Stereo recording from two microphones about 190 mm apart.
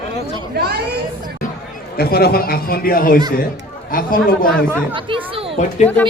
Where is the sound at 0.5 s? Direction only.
55° right (ahead or behind).